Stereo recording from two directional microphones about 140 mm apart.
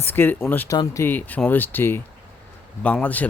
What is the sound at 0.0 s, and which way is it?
Speech, 15° left (ahead or behind).